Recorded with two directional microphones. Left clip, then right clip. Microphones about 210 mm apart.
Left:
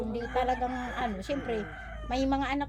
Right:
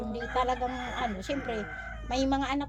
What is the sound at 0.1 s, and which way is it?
A woman's voice, 10° right (ahead or behind).